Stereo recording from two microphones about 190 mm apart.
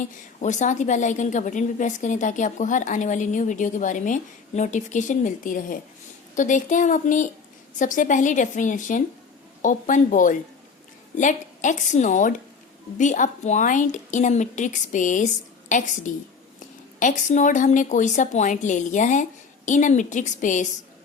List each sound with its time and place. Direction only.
0.0 s a woman's voice: 40° left (ahead or behind)
16.6 s a woman's voice: 40° left (ahead or behind)